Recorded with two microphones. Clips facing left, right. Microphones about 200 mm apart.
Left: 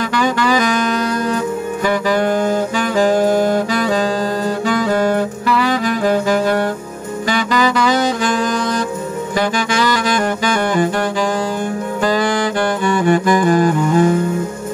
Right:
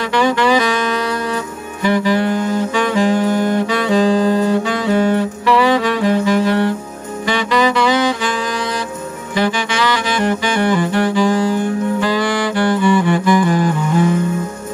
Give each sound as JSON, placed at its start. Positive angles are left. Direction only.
{"t": 0.2, "sound": "saxophone", "side_deg": 40}
{"t": 2.1, "sound": "saxophone", "side_deg": 40}
{"t": 9.7, "sound": "saxophone", "side_deg": 40}
{"t": 12.9, "sound": "music", "side_deg": 45}